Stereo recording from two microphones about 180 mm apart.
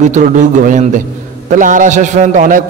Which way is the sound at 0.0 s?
45° right (ahead or behind).